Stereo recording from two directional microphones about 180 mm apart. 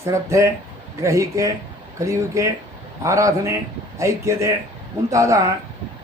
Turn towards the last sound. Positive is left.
turn(degrees=-15)  # may be behind; listen again after turning